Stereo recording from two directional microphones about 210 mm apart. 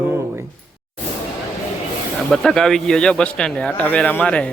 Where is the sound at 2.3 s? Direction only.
Centre (ahead or behind).